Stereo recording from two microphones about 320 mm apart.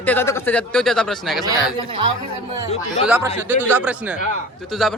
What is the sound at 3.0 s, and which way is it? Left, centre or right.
A man's voice, centre.